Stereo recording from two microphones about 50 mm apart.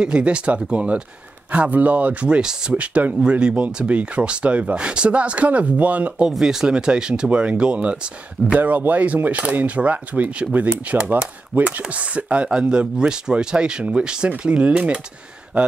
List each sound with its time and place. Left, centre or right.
0.0 s speech: right
2.2 s speech: centre
2.7 s speech: right
6.4 s speech: centre
8.5 s speech: right
11.5 s speech: right; by 15.7 s centre